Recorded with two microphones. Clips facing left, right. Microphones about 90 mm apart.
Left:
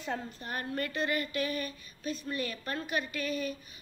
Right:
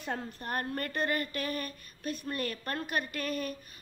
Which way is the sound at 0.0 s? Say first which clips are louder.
Even; 50° right (ahead or behind).